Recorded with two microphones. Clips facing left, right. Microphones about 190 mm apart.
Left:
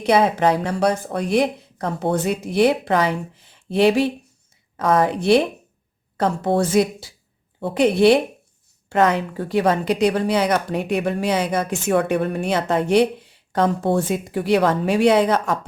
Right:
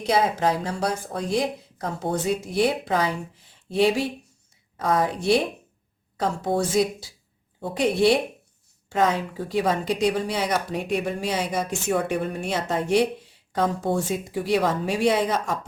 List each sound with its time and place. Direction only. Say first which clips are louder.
0.0 s a woman's voice: left 5 dB; 65° left (ahead or behind)